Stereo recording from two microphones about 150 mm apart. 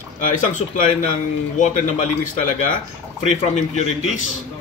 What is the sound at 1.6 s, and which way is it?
Speech, 55° left (ahead or behind).